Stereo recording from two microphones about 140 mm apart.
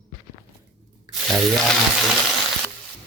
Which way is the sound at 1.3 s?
Centre (ahead or behind).